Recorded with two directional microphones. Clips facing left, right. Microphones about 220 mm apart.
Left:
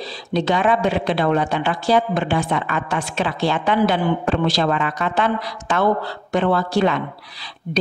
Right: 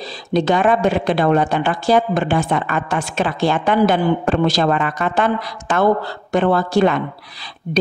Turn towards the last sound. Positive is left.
turn(degrees=-50)  # may be behind; listen again after turning